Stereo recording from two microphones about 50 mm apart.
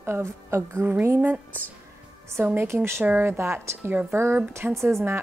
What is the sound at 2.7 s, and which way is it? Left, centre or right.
A woman's voice, right.